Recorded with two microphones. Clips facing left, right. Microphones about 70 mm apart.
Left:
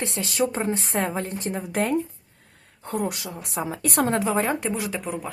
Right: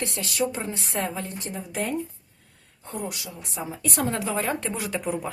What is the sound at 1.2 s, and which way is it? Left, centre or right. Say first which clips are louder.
Speech: left 5 dB; left.